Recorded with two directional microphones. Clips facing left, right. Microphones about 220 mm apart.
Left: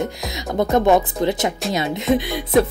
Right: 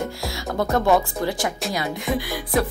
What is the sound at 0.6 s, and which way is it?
Speech, 20° left (ahead or behind).